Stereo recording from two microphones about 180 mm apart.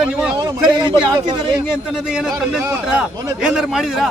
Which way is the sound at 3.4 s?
5° right (ahead or behind).